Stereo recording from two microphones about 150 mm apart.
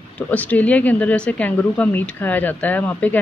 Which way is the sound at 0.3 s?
10° left (ahead or behind).